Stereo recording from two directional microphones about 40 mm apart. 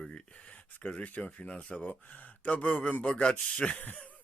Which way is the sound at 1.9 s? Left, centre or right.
Left.